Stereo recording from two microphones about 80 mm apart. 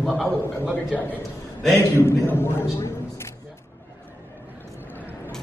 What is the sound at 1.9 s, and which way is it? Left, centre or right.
A man's voice, left.